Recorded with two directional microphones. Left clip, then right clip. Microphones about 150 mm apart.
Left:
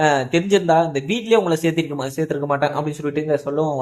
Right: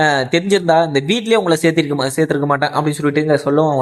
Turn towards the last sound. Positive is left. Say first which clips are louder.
# right 6 dB
turn(degrees=-25)  # may be behind; listen again after turning